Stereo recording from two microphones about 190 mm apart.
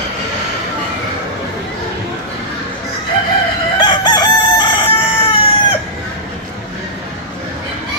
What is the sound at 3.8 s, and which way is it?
Chicken, 25° left (ahead or behind).